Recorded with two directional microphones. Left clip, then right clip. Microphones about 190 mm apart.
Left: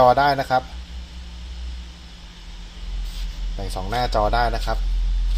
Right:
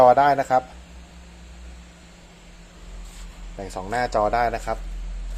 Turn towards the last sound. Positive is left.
turn(degrees=-10)  # may be behind; listen again after turning